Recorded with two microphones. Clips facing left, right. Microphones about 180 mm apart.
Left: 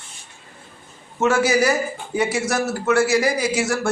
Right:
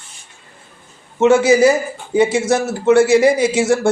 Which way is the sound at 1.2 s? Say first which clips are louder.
Right 7 dB; 25° right (ahead or behind).